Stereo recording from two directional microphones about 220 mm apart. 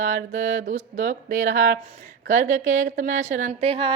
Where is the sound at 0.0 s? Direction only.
35° right (ahead or behind).